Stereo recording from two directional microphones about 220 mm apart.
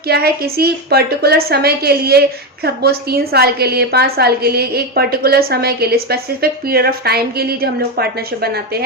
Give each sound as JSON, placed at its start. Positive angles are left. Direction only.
{"t": 0.1, "sound": "a woman's voice", "side_deg": -45}